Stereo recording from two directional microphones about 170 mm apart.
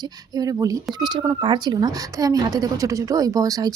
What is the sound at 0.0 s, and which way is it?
A woman's voice, 20° right (ahead or behind).